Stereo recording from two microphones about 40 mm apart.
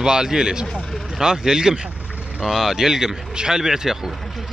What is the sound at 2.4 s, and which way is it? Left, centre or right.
Speech, centre.